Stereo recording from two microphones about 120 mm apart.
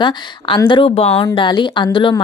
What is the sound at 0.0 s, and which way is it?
Speech, 40° left (ahead or behind).